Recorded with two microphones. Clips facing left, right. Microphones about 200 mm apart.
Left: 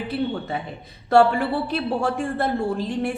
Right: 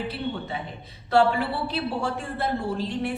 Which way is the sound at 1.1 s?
50° left (ahead or behind).